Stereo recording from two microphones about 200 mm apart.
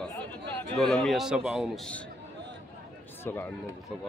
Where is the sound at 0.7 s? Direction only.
Centre (ahead or behind).